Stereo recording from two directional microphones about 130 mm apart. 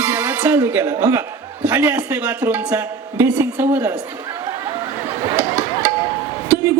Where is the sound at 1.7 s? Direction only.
15° right (ahead or behind).